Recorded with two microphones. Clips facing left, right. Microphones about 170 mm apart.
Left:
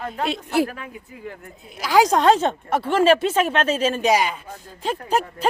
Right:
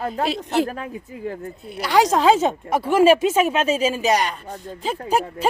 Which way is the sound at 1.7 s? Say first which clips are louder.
Left 1 dB; centre (ahead or behind).